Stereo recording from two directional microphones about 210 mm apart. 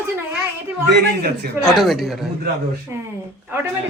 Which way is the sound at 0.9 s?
50° right (ahead or behind).